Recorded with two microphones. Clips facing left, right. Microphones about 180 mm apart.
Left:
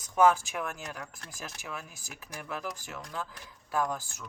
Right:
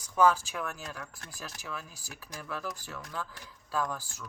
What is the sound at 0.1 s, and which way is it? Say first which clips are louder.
Speech: left 1 dB; 20° left (ahead or behind).